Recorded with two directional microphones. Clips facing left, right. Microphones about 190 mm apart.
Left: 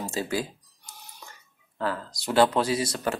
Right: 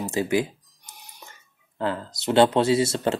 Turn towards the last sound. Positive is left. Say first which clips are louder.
# right 6 dB
turn(degrees=-25)  # may be behind; listen again after turning